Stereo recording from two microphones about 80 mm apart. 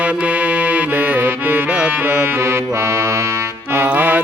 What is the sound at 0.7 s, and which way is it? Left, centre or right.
Accordion, right.